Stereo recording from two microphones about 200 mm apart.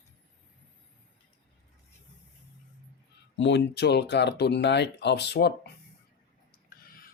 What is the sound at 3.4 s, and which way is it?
Speech, 60° left (ahead or behind).